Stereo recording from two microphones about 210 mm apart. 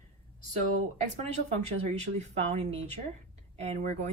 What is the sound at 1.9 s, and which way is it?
Speech, 30° right (ahead or behind).